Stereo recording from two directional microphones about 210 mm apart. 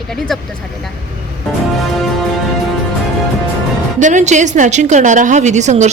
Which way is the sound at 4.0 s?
35° right (ahead or behind).